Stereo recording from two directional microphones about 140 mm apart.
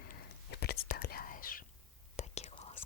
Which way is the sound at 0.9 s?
90° left.